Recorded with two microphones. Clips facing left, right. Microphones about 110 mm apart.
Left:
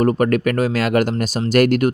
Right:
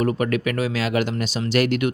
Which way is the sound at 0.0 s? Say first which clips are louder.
Left 5 dB; 45° left (ahead or behind).